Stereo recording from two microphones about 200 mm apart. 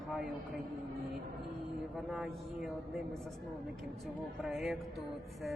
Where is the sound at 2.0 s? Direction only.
Centre (ahead or behind).